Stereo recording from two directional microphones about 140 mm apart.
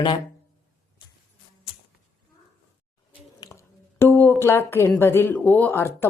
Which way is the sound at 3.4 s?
30° left (ahead or behind).